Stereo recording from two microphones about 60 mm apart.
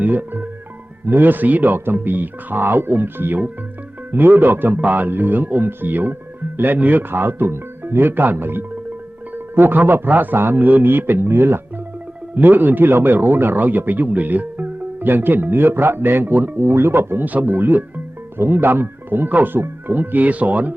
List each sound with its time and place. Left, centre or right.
0.0 s speech: right
16.6 s speech: right
17.2 s speech: right